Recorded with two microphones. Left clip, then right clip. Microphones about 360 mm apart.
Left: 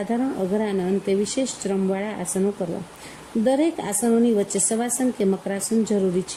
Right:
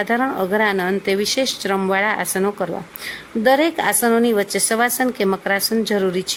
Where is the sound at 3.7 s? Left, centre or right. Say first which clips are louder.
Right 6 dB; right.